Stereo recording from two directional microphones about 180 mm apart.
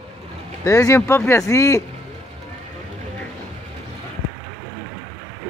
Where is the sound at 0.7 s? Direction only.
20° left (ahead or behind).